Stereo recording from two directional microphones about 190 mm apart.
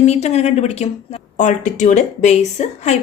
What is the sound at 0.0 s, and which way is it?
A woman's voice, 35° left (ahead or behind).